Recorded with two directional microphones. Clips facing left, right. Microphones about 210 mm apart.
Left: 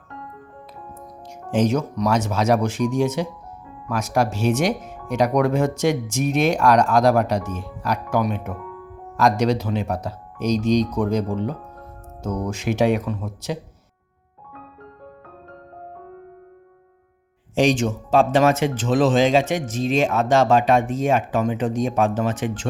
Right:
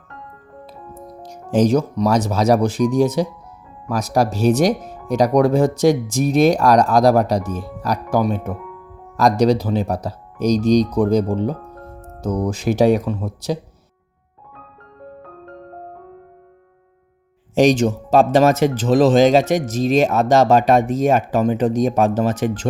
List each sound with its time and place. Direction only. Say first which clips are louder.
1.2 s speech: right 4 dB; 35° right (ahead or behind)
17.5 s speech: right 4 dB; 40° right (ahead or behind)